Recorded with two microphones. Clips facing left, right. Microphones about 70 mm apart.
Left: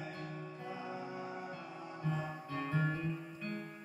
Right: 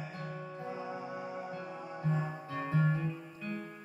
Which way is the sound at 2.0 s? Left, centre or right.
Right.